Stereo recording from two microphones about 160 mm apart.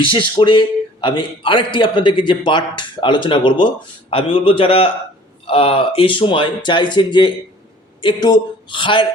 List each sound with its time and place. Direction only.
0.0 s a man's voice: 30° left (ahead or behind)